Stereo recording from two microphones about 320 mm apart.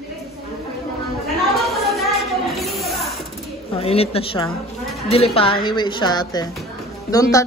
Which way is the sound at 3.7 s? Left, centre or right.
Centre.